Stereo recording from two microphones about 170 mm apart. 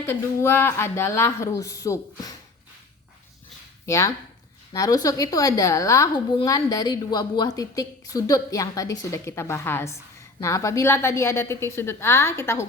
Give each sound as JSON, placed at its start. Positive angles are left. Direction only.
{"t": 0.0, "sound": "speech", "side_deg": 15}
{"t": 3.8, "sound": "a woman's voice", "side_deg": 15}